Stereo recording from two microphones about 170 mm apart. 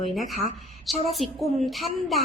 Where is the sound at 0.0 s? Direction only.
Centre (ahead or behind).